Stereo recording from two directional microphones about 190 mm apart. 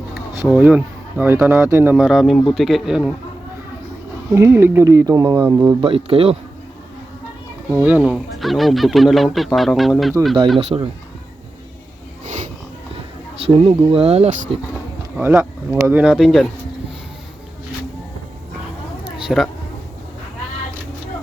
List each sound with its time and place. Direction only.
0.3 s speech: 5° right (ahead or behind)
4.4 s speech: 15° right (ahead or behind); by 6.3 s 30° right (ahead or behind)
7.7 s speech: 10° right (ahead or behind)
10.7 s speech: 20° right (ahead or behind)
13.5 s speech: 30° right (ahead or behind)
15.2 s speech: 10° right (ahead or behind)
19.1 s a sound: centre (ahead or behind)